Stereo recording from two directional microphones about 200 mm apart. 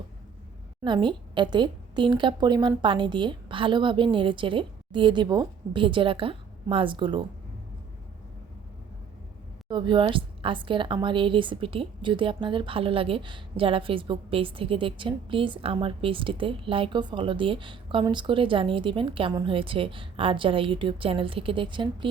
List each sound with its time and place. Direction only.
0.9 s a woman's voice: 25° right (ahead or behind)
9.6 s a woman's voice: 25° right (ahead or behind)